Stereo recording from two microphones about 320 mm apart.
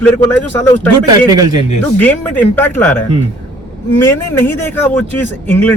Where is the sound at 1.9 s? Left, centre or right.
Centre.